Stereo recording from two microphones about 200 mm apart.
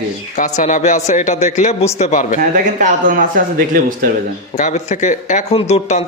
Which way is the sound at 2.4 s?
40° right (ahead or behind).